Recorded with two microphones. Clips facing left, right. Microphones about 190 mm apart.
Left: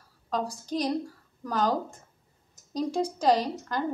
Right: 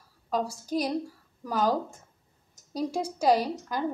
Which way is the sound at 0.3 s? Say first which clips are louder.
Right 1 dB; 10° right (ahead or behind).